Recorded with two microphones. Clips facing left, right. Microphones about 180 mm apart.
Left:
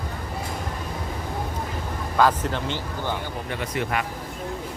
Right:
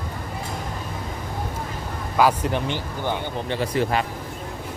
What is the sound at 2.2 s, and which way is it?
Speech, 15° right (ahead or behind).